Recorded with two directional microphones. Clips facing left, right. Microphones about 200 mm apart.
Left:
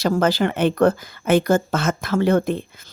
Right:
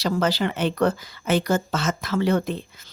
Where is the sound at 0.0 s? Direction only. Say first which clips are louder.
Left 4 dB; 50° left (ahead or behind).